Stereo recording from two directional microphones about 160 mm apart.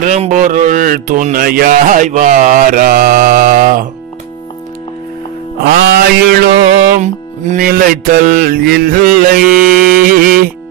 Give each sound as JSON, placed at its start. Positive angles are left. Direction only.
{"t": 0.0, "sound": "speech", "side_deg": -50}
{"t": 5.6, "sound": "music", "side_deg": -75}
{"t": 7.0, "sound": "music", "side_deg": -55}